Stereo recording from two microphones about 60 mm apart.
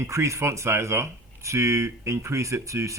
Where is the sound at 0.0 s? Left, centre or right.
Right.